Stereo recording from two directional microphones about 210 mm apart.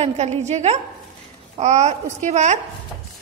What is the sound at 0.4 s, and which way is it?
A woman's voice, 30° right (ahead or behind).